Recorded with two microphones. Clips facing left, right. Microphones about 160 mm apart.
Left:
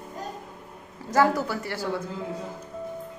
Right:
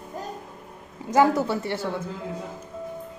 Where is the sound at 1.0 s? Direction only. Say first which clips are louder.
Right 3 dB; 20° right (ahead or behind).